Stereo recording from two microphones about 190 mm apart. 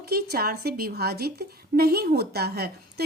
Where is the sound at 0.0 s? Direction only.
55° right (ahead or behind).